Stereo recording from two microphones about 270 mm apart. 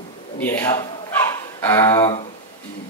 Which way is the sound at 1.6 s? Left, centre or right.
Centre.